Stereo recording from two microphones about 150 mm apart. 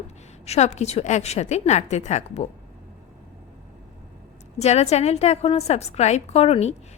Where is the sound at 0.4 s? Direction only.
45° left (ahead or behind).